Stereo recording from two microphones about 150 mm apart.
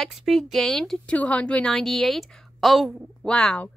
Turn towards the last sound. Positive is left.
turn(degrees=5)  # may be behind; listen again after turning